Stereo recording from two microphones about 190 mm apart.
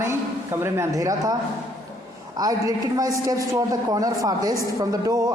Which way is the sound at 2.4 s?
20° right (ahead or behind).